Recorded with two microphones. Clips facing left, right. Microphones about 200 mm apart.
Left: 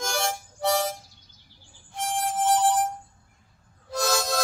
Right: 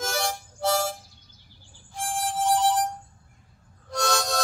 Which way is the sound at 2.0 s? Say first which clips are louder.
Left 1 dB; centre (ahead or behind).